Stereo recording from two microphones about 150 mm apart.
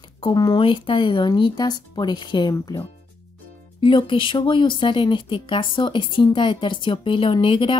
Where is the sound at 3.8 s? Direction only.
35° left (ahead or behind).